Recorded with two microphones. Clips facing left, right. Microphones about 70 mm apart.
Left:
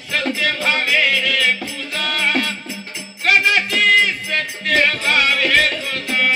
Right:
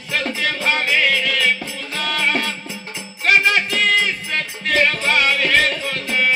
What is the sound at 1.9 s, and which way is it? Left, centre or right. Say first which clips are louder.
Music: even; right.